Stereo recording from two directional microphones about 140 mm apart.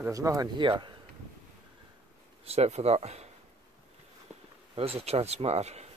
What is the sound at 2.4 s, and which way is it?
Speech, 50° right (ahead or behind).